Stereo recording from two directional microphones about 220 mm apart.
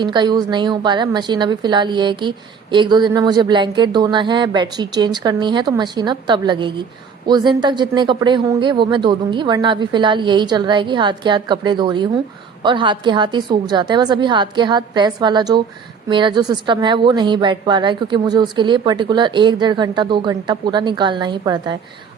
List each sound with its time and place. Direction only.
0.0 s a woman's voice: 20° right (ahead or behind)